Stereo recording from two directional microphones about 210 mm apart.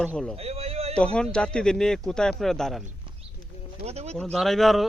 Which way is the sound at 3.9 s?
30° right (ahead or behind).